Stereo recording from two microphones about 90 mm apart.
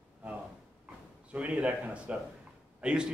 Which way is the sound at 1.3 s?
15° right (ahead or behind).